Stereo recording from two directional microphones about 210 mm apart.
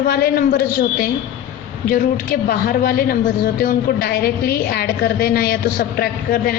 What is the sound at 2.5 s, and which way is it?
A woman's voice, 45° left (ahead or behind).